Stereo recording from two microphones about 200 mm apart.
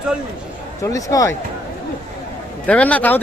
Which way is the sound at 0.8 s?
15° left (ahead or behind).